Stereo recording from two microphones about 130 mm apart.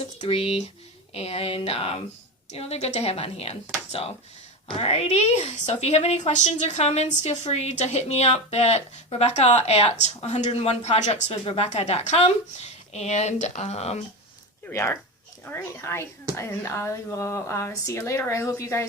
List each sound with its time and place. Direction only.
0.2 s speech: 50° left (ahead or behind)
4.7 s a woman's voice: 50° left (ahead or behind)
14.7 s a woman's voice: 20° left (ahead or behind)